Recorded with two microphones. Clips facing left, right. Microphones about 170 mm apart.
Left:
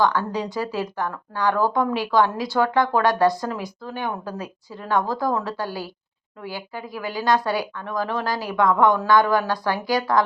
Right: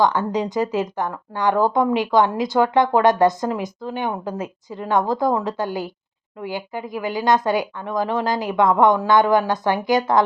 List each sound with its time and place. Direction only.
0.0 s speech: 20° right (ahead or behind)